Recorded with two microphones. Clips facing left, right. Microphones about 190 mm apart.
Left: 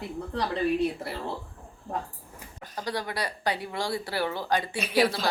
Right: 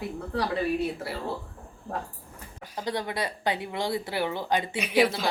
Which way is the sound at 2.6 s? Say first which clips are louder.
Right 1 dB; 10° right (ahead or behind).